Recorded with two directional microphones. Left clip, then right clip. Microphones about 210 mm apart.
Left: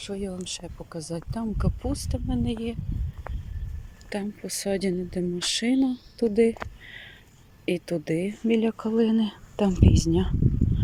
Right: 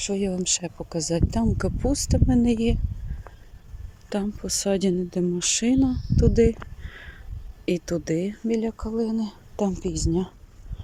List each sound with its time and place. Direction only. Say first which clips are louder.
0.0 s speech: right 7 dB; 15° right (ahead or behind)
4.1 s speech: right 4 dB; 15° right (ahead or behind)
7.6 s speech: right 2 dB; 10° right (ahead or behind)